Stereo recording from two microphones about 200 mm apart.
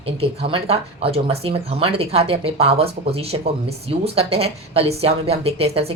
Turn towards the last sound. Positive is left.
turn(degrees=-30)  # may be behind; listen again after turning